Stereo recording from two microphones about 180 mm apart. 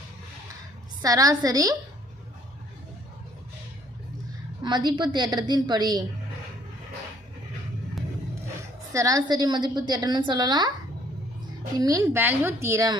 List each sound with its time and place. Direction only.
1.0 s a woman's voice: 20° right (ahead or behind)
4.6 s a woman's voice: 25° right (ahead or behind)
8.9 s a woman's voice: 20° right (ahead or behind)
11.8 s speech: 20° right (ahead or behind)